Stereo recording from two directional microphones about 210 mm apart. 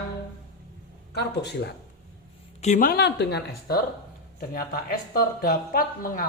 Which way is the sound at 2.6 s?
35° left (ahead or behind).